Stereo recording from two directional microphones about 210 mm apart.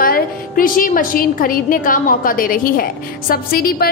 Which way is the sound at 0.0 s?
40° left (ahead or behind).